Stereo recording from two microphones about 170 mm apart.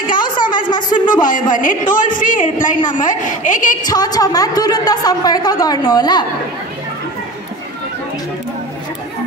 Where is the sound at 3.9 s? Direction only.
25° left (ahead or behind).